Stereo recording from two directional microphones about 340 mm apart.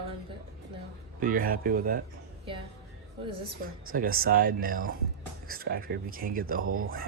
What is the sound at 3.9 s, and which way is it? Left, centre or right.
Speech, right.